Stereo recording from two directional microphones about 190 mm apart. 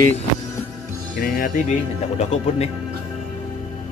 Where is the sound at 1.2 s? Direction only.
50° left (ahead or behind).